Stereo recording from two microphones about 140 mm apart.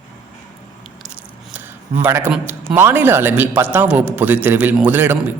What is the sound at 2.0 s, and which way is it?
A man's voice, 15° right (ahead or behind).